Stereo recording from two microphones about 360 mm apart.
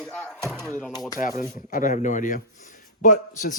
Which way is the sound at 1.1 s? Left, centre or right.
Left.